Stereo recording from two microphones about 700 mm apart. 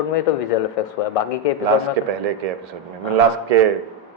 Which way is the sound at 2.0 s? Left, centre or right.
Right.